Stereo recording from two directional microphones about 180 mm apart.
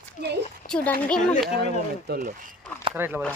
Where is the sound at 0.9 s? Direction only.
5° left (ahead or behind).